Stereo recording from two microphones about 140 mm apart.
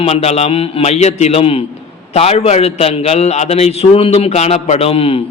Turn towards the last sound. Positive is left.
turn(degrees=40)  # may be behind; listen again after turning